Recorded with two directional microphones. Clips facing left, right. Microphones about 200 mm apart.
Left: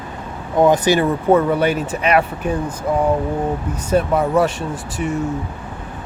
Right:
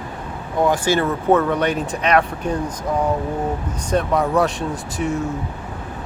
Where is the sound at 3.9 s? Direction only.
5° left (ahead or behind).